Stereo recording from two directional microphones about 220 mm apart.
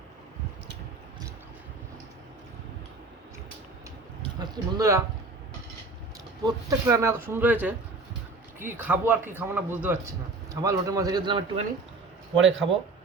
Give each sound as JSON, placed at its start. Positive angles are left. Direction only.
{"t": 4.2, "sound": "a sound", "side_deg": -20}
{"t": 6.4, "sound": "a man's voice", "side_deg": -15}
{"t": 8.9, "sound": "a man's voice", "side_deg": -10}
{"t": 12.4, "sound": "speech", "side_deg": -60}